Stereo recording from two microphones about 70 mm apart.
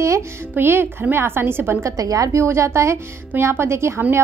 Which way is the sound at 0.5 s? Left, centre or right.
Right.